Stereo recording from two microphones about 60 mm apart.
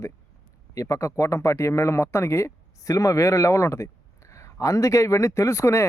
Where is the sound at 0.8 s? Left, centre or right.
Left.